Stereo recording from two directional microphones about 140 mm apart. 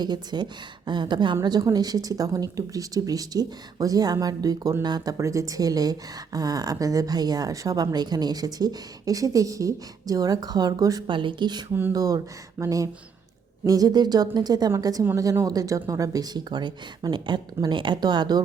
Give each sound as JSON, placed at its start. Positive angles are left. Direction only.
{"t": 0.0, "sound": "a woman's voice", "side_deg": -30}